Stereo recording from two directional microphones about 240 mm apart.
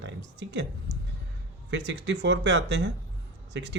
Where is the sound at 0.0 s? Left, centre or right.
Right.